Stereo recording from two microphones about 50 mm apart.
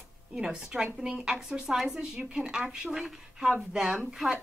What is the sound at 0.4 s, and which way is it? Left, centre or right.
A woman's voice, centre.